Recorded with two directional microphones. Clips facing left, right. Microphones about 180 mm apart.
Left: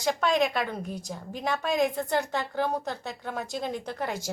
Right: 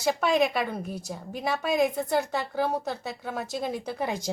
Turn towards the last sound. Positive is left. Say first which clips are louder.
# right 2 dB
turn(degrees=-15)  # may be behind; listen again after turning